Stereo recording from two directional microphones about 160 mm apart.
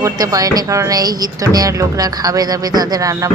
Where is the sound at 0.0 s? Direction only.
20° right (ahead or behind).